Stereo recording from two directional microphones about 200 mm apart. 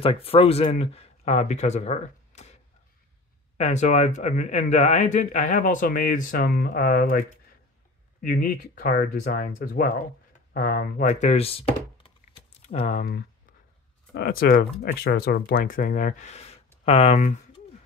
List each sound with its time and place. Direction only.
0.0 s speech: 30° left (ahead or behind)
3.5 s speech: 35° left (ahead or behind)